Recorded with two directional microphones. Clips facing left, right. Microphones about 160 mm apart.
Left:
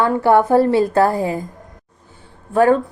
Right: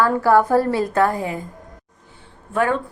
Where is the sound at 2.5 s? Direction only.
35° left (ahead or behind).